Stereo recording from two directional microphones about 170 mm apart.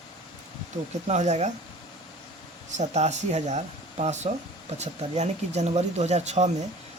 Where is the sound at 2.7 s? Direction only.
40° right (ahead or behind).